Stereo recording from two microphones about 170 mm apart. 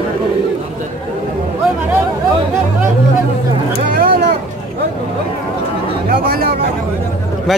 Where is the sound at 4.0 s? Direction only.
65° right (ahead or behind).